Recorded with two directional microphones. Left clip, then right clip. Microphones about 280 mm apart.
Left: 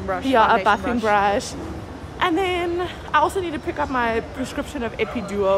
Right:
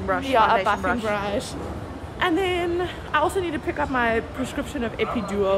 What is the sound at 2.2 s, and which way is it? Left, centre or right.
A woman's voice, centre.